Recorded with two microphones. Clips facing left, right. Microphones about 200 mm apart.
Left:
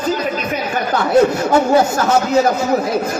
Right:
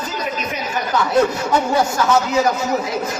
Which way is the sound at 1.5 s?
50° left (ahead or behind).